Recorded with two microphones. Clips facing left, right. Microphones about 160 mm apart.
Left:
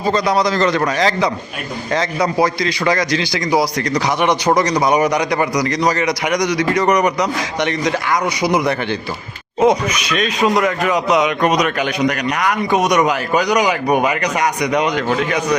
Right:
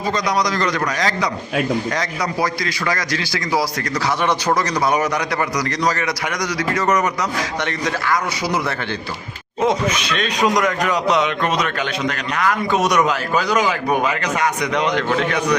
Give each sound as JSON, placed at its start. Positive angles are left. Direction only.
{"t": 0.1, "sound": "a man's voice", "side_deg": 30}